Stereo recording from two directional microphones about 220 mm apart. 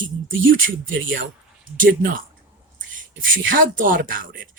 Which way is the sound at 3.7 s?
40° right (ahead or behind).